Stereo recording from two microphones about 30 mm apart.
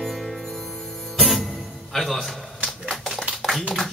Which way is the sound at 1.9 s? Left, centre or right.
Centre.